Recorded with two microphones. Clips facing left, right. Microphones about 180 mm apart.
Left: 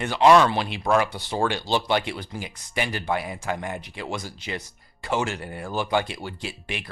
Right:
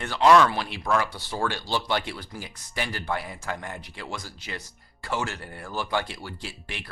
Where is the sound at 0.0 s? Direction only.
20° left (ahead or behind).